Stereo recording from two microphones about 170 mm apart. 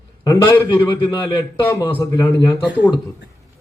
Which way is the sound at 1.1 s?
30° left (ahead or behind).